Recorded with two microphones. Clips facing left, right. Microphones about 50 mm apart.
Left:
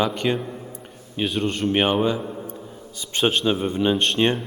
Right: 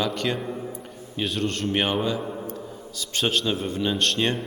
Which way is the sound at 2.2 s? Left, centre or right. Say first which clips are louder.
Even; centre.